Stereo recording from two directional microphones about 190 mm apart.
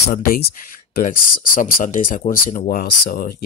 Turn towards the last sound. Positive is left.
turn(degrees=50)  # may be behind; listen again after turning